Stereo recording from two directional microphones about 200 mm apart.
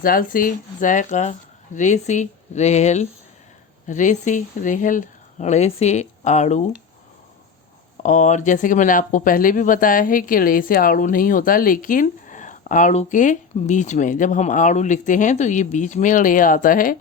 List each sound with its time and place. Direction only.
0.0 s speech: 45° left (ahead or behind)
8.0 s speech: 35° left (ahead or behind)